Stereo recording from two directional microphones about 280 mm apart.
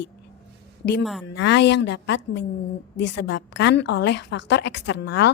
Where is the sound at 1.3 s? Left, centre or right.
Left.